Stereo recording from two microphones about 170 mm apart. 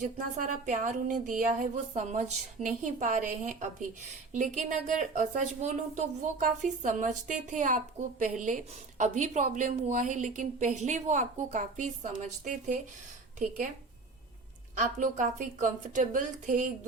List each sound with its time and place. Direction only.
0.0 s speech: 50° right (ahead or behind)
14.8 s speech: 45° right (ahead or behind)